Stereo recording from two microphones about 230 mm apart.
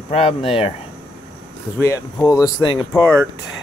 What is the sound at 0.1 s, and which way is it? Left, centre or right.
Speech, left.